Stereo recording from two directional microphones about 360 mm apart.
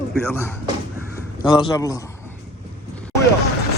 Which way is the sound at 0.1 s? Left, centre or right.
Centre.